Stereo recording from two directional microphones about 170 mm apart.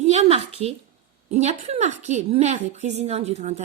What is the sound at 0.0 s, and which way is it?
A woman's voice, 40° right (ahead or behind).